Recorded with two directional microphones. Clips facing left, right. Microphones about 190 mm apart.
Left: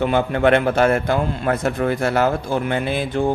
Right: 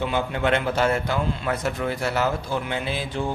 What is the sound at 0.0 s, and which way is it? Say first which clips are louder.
A man's voice: left 7 dB; 55° left (ahead or behind).